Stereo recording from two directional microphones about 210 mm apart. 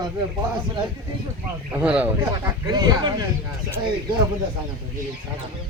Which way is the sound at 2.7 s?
20° right (ahead or behind).